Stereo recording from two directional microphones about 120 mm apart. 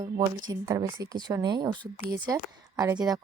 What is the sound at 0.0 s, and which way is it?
A woman's voice, 30° right (ahead or behind).